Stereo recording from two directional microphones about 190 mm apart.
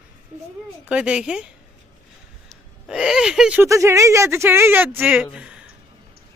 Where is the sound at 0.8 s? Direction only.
5° right (ahead or behind).